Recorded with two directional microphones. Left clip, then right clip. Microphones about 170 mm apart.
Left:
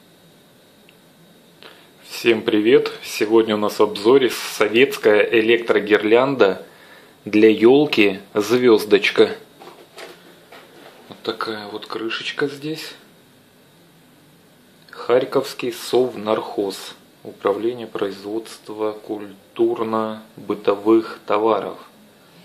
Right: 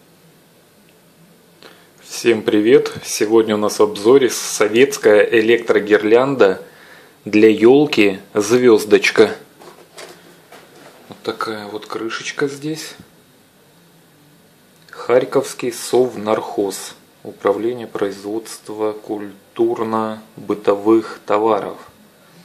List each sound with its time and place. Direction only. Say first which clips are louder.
1.6 s speech: right 1 dB; 5° right (ahead or behind)
11.1 s speech: right 2 dB; 10° right (ahead or behind)
14.9 s speech: right 3 dB; 10° right (ahead or behind)